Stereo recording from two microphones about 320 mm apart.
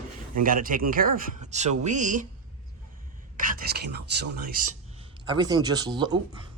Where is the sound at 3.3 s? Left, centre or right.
Right.